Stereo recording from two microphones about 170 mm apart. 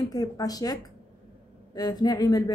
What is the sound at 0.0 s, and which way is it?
Speech, 20° left (ahead or behind).